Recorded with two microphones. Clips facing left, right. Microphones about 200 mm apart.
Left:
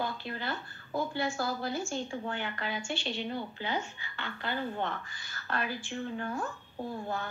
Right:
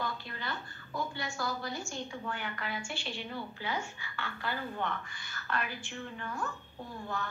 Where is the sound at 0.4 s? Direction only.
30° left (ahead or behind).